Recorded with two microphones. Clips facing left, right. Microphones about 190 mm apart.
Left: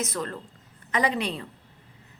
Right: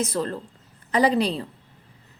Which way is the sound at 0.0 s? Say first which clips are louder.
Right 5 dB; 30° right (ahead or behind).